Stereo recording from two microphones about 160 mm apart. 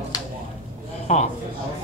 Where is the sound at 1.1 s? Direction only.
45° left (ahead or behind).